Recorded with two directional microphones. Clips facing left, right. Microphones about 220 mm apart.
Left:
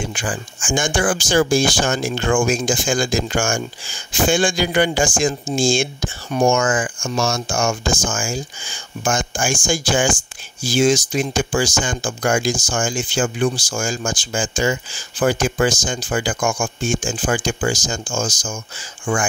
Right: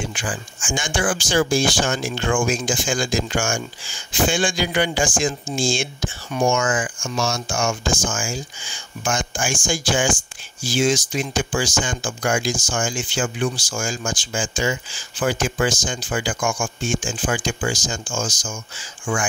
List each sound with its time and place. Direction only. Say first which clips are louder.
0.1 s speech: left 3 dB; 45° left (ahead or behind)